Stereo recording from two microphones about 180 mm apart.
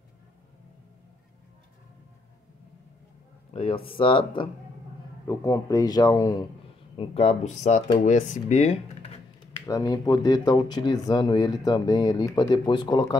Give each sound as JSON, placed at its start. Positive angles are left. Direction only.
{"t": 3.5, "sound": "speech", "side_deg": 30}
{"t": 7.0, "sound": "speech", "side_deg": 35}
{"t": 9.7, "sound": "speech", "side_deg": 20}